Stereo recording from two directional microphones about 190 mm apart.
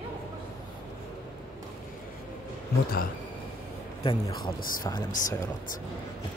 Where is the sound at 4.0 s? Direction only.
25° left (ahead or behind).